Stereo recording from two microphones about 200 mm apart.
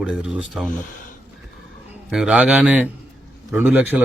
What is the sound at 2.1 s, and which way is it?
A man's voice, 5° right (ahead or behind).